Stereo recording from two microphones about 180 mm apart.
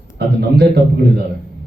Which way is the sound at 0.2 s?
65° right (ahead or behind).